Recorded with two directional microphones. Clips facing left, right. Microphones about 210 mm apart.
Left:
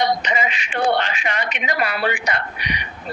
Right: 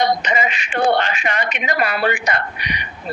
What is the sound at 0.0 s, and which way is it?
Speech, 50° right (ahead or behind).